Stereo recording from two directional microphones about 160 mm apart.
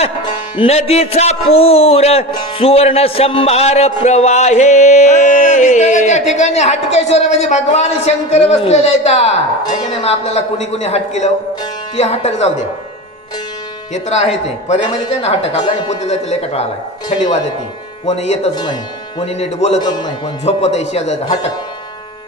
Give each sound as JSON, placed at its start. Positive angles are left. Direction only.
{"t": 0.0, "sound": "a man's voice", "side_deg": 35}
{"t": 13.9, "sound": "a man's voice", "side_deg": 45}
{"t": 15.9, "sound": "a man's voice", "side_deg": 45}
{"t": 18.0, "sound": "speech", "side_deg": 40}
{"t": 18.6, "sound": "speech", "side_deg": 30}
{"t": 19.8, "sound": "speech", "side_deg": 30}
{"t": 20.6, "sound": "a man's voice", "side_deg": 45}